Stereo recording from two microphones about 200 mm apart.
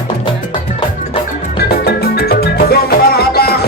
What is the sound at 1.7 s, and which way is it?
Music, 50° left (ahead or behind).